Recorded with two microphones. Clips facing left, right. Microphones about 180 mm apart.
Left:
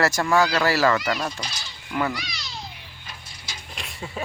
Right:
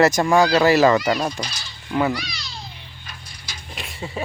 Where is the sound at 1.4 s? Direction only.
25° left (ahead or behind).